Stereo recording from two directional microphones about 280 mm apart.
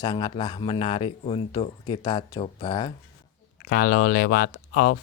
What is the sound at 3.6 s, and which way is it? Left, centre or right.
Speech, left.